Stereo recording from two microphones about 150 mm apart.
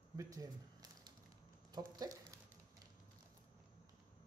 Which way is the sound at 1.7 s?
25° right (ahead or behind).